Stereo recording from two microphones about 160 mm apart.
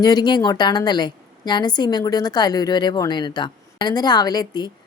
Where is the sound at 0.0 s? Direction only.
25° left (ahead or behind).